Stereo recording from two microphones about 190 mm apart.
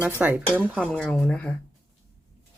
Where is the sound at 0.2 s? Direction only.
10° right (ahead or behind).